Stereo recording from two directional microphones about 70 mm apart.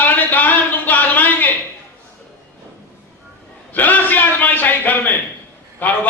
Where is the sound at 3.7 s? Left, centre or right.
Left.